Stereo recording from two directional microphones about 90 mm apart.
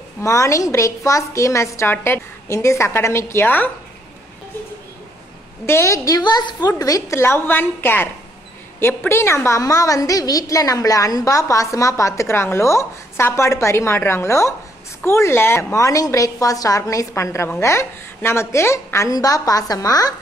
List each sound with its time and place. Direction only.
0.2 s a woman's voice: 35° left (ahead or behind)
5.7 s a woman's voice: 30° left (ahead or behind)
6.1 s a woman's voice: 50° left (ahead or behind)
6.8 s a woman's voice: 40° left (ahead or behind)
7.2 s a woman's voice: 25° left (ahead or behind); by 20.2 s 45° left (ahead or behind)